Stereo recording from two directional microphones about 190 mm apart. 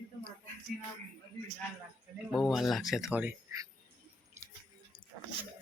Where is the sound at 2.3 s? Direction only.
Centre (ahead or behind).